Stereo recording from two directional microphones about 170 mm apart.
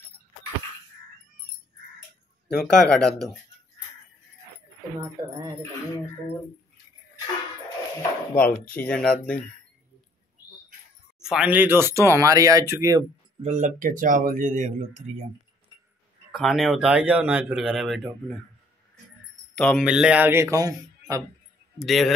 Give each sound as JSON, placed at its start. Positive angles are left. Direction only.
{"t": 2.4, "sound": "speech", "side_deg": 5}
{"t": 5.0, "sound": "speech", "side_deg": -20}
{"t": 8.4, "sound": "speech", "side_deg": 10}
{"t": 11.1, "sound": "speech", "side_deg": -5}
{"t": 13.4, "sound": "speech", "side_deg": -45}
{"t": 16.3, "sound": "speech", "side_deg": 0}
{"t": 19.5, "sound": "speech", "side_deg": 0}
{"t": 21.7, "sound": "speech", "side_deg": 0}